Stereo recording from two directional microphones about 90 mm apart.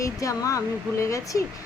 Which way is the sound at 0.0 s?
40° left (ahead or behind).